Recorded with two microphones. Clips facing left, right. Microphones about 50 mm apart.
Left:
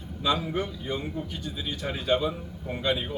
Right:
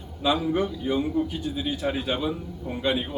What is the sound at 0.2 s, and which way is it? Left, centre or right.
A man's voice, centre.